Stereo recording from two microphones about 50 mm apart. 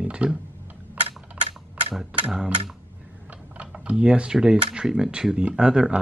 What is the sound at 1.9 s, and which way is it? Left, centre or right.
Speech, centre.